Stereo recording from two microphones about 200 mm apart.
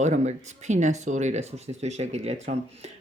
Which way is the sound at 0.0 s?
35° right (ahead or behind).